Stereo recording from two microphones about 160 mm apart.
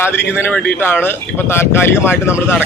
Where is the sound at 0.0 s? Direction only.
15° left (ahead or behind).